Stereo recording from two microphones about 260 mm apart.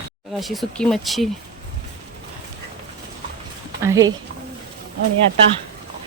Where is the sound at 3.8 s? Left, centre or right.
Centre.